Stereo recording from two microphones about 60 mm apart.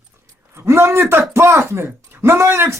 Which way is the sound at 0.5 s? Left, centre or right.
Right.